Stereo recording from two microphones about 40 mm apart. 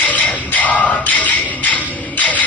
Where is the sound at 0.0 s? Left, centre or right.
Left.